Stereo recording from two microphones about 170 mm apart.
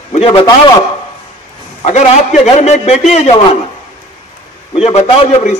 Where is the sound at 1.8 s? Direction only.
40° left (ahead or behind).